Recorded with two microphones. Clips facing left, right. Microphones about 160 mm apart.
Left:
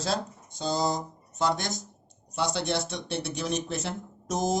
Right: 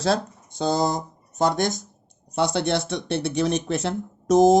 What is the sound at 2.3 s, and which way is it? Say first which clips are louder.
Speech: right 6 dB; 60° right (ahead or behind).